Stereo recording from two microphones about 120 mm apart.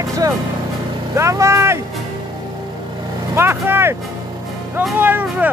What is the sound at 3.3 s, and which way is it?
Speech, 20° right (ahead or behind).